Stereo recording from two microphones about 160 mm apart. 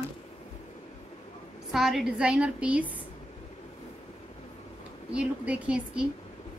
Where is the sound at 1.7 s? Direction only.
Centre (ahead or behind).